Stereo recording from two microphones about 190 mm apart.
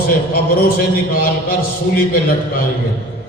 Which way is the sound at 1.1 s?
50° left (ahead or behind).